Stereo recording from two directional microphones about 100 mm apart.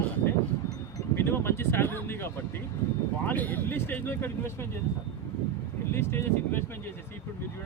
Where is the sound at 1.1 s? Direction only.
25° left (ahead or behind).